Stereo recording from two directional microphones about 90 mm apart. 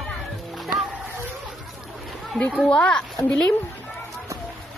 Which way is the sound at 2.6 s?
15° left (ahead or behind).